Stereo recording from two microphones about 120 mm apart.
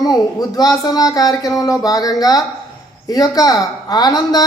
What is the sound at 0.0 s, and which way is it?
Speech, 30° left (ahead or behind).